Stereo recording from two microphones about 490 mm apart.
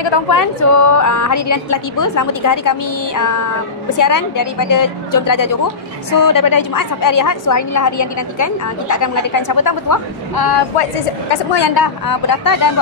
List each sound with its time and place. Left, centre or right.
0.0 s speech: left
0.4 s a woman's voice: left
11.5 s speech: left